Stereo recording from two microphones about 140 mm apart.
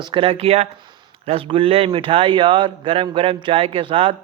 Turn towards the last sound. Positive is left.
turn(degrees=-40)  # may be behind; listen again after turning